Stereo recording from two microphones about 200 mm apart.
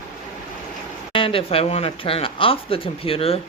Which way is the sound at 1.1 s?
25° left (ahead or behind).